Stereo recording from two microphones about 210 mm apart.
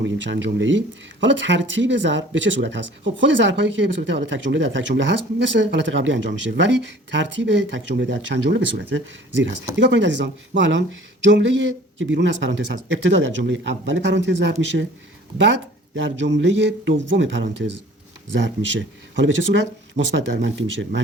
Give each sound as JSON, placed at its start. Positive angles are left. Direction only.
{"t": 0.0, "sound": "speech", "side_deg": -60}
{"t": 16.0, "sound": "speech", "side_deg": -60}